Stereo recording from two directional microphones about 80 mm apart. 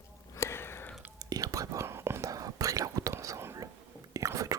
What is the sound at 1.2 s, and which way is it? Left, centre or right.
Whispering, right.